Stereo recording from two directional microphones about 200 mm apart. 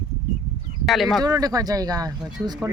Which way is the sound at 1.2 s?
20° right (ahead or behind).